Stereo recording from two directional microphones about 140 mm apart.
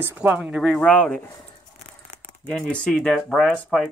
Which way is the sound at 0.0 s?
15° right (ahead or behind).